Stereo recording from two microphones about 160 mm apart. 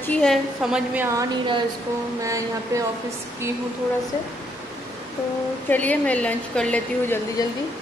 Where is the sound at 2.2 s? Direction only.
20° right (ahead or behind).